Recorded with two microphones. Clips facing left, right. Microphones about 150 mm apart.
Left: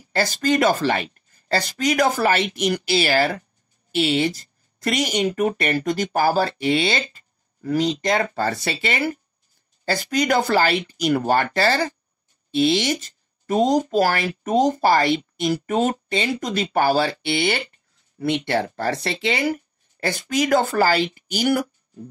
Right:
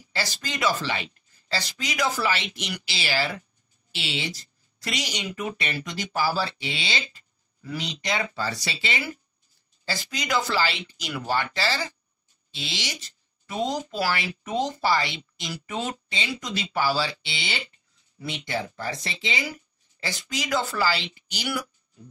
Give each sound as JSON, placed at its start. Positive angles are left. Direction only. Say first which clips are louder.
{"t": 0.1, "sound": "speech", "louder": "left 12 dB", "side_deg": 50}